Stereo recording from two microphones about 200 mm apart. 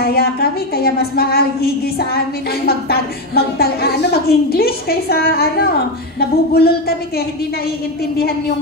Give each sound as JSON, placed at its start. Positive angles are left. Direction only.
{"t": 0.0, "sound": "a woman's voice", "side_deg": 50}